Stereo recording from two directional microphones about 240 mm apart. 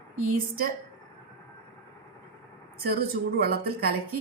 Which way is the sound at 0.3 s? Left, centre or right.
Right.